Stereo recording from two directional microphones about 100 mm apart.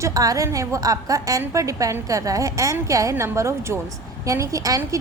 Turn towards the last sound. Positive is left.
turn(degrees=-35)  # may be behind; listen again after turning